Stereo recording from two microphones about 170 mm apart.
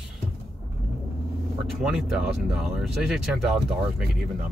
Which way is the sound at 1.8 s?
5° right (ahead or behind).